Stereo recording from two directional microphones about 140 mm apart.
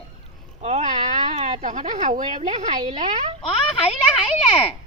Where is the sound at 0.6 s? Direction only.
55° right (ahead or behind).